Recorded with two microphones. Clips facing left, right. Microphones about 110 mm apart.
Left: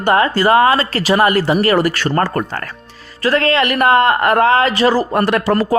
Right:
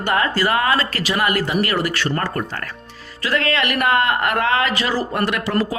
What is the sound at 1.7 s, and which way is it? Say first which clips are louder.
A man's voice: left 6 dB; 45° left (ahead or behind).